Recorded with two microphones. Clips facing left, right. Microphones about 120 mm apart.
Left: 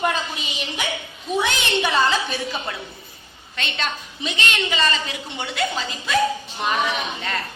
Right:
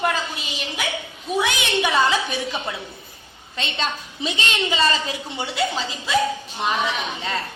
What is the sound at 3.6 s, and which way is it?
A woman's voice, 30° right (ahead or behind).